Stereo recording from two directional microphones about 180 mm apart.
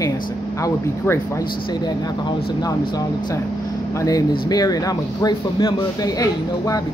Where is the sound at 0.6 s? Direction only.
15° left (ahead or behind).